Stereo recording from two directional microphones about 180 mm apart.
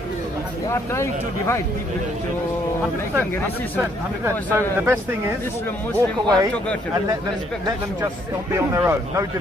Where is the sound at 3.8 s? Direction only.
15° right (ahead or behind).